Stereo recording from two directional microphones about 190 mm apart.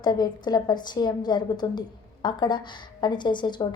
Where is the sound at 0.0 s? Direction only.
20° left (ahead or behind).